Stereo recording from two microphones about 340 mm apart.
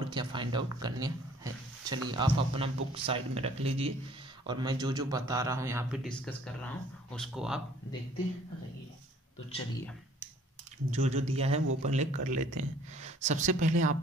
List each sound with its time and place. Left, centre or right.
0.0 s speech: centre
6.0 s speech: centre
10.9 s a woman's voice: centre